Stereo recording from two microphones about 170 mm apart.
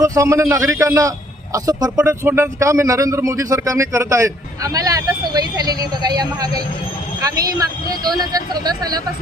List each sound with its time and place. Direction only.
0.0 s a man's voice: 20° right (ahead or behind)